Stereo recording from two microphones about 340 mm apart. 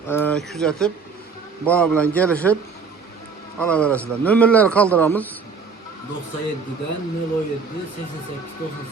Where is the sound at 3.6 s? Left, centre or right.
Centre.